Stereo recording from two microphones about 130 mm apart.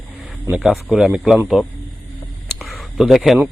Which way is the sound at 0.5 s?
5° right (ahead or behind).